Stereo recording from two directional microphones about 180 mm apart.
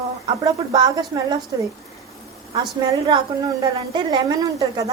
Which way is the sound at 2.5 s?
25° right (ahead or behind).